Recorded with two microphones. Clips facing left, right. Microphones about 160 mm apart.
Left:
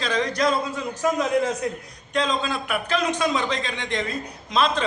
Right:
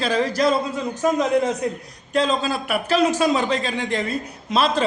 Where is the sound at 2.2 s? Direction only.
35° right (ahead or behind).